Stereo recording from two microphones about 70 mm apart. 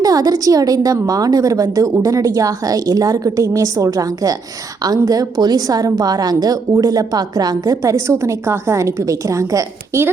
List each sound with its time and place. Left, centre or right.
0.0 s a woman's voice: right
7.8 s a woman's voice: right